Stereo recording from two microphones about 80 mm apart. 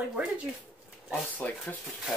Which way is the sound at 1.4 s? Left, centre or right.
Centre.